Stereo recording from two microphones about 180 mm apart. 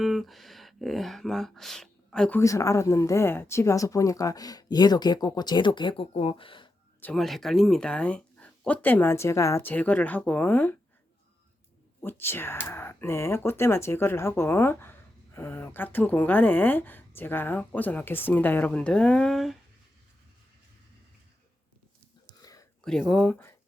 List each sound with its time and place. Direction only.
0.0 s speech: centre (ahead or behind)
2.4 s speech: 15° left (ahead or behind)
7.0 s speech: centre (ahead or behind)
12.0 s speech: 10° left (ahead or behind)
22.4 s a sound: 20° left (ahead or behind)
22.8 s speech: 5° left (ahead or behind)